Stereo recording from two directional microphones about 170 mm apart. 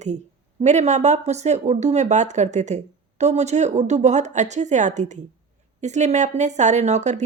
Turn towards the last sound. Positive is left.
turn(degrees=-45)  # may be behind; listen again after turning